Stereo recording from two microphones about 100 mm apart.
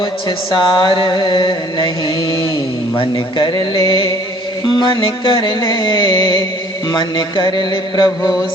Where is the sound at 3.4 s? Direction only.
50° left (ahead or behind).